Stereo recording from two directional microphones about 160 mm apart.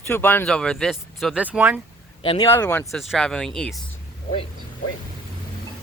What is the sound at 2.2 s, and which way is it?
Speech, 35° left (ahead or behind).